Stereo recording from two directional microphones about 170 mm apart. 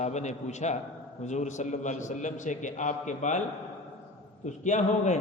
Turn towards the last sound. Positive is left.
turn(degrees=45)  # may be behind; listen again after turning